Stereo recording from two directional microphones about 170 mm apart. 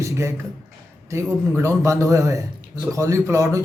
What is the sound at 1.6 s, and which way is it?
A man's voice, 20° right (ahead or behind).